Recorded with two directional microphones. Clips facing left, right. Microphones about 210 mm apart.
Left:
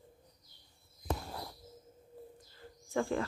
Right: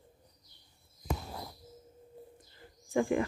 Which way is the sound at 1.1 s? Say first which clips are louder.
Even; 10° right (ahead or behind).